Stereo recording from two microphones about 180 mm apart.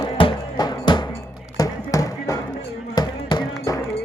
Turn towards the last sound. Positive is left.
turn(degrees=25)  # may be behind; listen again after turning